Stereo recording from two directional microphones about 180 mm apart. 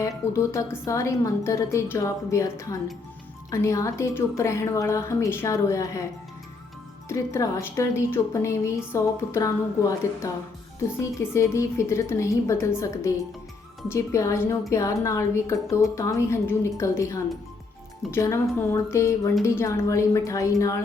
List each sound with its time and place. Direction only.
0.0 s a woman's voice: 15° left (ahead or behind)
7.1 s a woman's voice: 15° left (ahead or behind)